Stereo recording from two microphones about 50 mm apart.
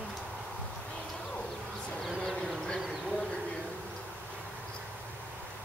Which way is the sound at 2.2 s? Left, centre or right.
Centre.